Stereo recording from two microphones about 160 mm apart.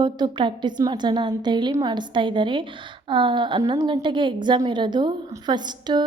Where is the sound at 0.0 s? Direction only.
30° right (ahead or behind).